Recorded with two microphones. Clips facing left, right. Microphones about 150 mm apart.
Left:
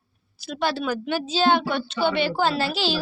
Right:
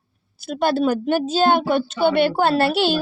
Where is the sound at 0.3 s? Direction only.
50° right (ahead or behind).